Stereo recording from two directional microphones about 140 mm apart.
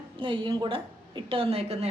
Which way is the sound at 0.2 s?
35° right (ahead or behind).